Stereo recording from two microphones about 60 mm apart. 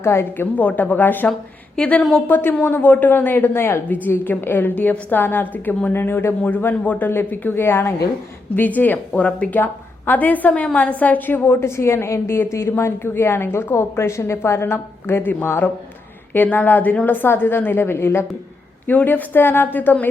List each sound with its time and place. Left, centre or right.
0.0 s a woman's voice: left
0.5 s speech: left
1.7 s a woman's voice: centre
2.2 s a woman's voice: left
3.6 s a woman's voice: left
4.0 s a woman's voice: left
8.5 s a woman's voice: left
18.9 s a woman's voice: left